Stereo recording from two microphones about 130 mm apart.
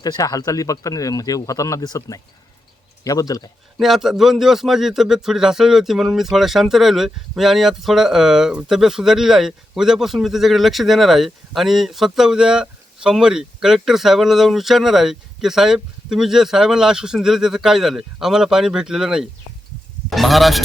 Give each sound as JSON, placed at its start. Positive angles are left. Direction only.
{"t": 0.0, "sound": "speech", "side_deg": 30}
{"t": 3.8, "sound": "a man's voice", "side_deg": 0}